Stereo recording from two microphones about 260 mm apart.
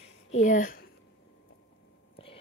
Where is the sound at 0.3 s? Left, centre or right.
Left.